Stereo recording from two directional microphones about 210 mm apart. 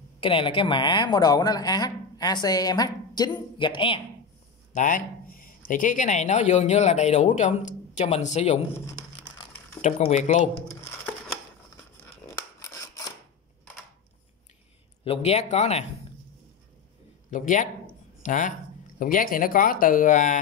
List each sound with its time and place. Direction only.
0.2 s a woman's voice: 25° left (ahead or behind)
4.7 s speech: 40° left (ahead or behind)
8.8 s a sound: 20° left (ahead or behind)
9.8 s speech: 30° left (ahead or behind)
12.5 s scissors: 15° left (ahead or behind)
15.0 s speech: 30° left (ahead or behind)
17.3 s speech: 35° left (ahead or behind)